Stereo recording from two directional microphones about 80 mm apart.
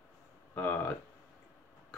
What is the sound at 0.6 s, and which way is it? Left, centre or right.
Speech, left.